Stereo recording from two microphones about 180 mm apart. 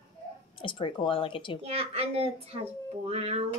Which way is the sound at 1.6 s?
35° right (ahead or behind).